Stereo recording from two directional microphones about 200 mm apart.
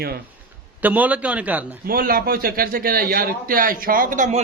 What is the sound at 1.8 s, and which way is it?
A man's voice, 45° right (ahead or behind).